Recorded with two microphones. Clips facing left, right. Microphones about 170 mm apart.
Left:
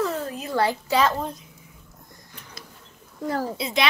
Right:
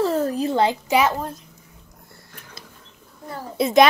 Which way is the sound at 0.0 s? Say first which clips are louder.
Right 6 dB; 40° right (ahead or behind).